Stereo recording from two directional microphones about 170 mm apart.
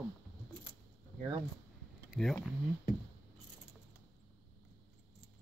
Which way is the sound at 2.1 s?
Centre (ahead or behind).